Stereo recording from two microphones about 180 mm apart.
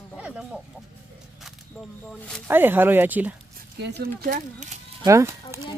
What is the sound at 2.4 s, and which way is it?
Speech, 10° right (ahead or behind).